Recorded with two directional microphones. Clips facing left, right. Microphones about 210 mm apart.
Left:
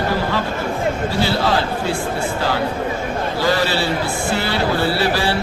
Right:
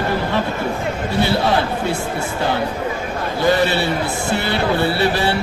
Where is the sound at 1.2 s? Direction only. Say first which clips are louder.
Right 2 dB; 20° right (ahead or behind).